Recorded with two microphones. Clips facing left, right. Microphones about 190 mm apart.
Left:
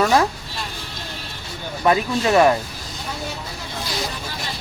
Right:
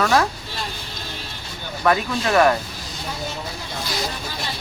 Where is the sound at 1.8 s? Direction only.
20° left (ahead or behind).